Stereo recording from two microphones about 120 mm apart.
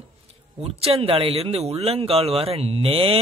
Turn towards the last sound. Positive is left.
turn(degrees=-50)  # may be behind; listen again after turning